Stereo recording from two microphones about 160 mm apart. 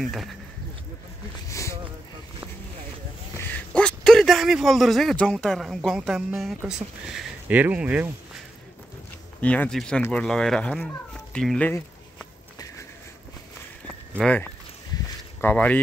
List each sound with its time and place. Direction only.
0.0 s speech: centre (ahead or behind)
1.5 s a sound: 20° left (ahead or behind)
3.3 s speech: 10° left (ahead or behind); by 8.1 s 10° right (ahead or behind)
9.4 s speech: 10° left (ahead or behind)
13.8 s a sound: 5° left (ahead or behind)
15.4 s speech: 10° left (ahead or behind)